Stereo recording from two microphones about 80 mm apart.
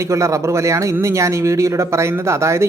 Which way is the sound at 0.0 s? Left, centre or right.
Right.